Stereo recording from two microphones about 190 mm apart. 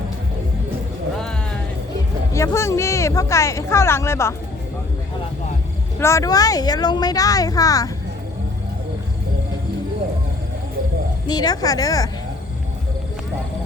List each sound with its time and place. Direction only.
2.3 s speech: 15° left (ahead or behind)
6.0 s speech: 15° left (ahead or behind)
11.3 s speech: 20° left (ahead or behind)